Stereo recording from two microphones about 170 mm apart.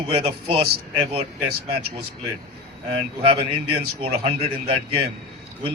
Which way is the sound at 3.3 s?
35° right (ahead or behind).